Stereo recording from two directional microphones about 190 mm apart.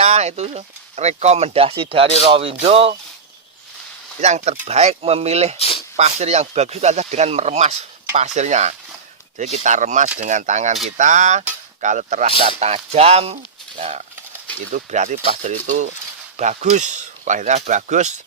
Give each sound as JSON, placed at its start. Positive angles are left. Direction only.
{"t": 0.0, "sound": "speech", "side_deg": -35}
{"t": 4.2, "sound": "speech", "side_deg": -35}
{"t": 5.5, "sound": "a sound", "side_deg": 30}
{"t": 6.0, "sound": "speech", "side_deg": -35}